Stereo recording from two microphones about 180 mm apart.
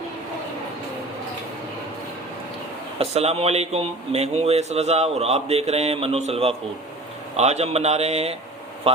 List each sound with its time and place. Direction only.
3.0 s speech: 35° right (ahead or behind)